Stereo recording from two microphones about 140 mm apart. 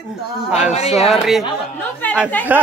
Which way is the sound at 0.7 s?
50° left (ahead or behind).